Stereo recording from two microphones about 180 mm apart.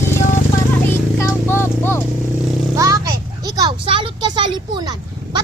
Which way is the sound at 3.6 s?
25° right (ahead or behind).